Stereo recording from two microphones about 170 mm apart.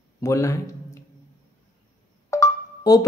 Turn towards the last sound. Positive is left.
turn(degrees=20)  # may be behind; listen again after turning